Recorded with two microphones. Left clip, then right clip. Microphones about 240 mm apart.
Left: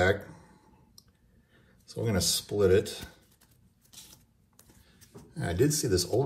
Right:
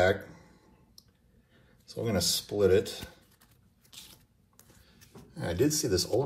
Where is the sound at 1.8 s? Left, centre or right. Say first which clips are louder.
Even; centre.